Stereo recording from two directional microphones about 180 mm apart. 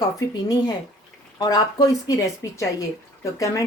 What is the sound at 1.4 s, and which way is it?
A woman's voice, 20° left (ahead or behind).